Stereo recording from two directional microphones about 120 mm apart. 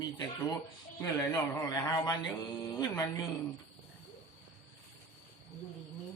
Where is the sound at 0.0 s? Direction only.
40° left (ahead or behind).